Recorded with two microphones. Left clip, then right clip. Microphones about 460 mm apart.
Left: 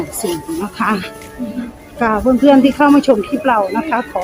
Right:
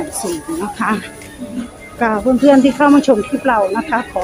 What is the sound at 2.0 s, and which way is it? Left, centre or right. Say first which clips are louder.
Speech: even; left.